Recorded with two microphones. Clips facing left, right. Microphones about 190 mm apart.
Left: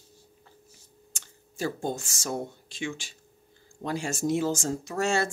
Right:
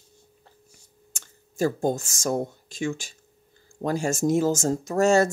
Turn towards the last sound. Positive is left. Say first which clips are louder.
# right 8 dB
turn(degrees=-40)  # may be behind; listen again after turning